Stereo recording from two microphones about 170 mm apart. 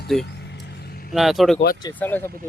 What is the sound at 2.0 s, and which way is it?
Speech, 10° left (ahead or behind).